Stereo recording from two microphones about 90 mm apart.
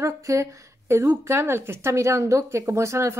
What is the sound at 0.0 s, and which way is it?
A woman's voice, 35° right (ahead or behind).